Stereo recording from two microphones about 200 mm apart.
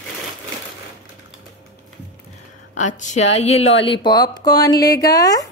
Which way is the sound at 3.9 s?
20° left (ahead or behind).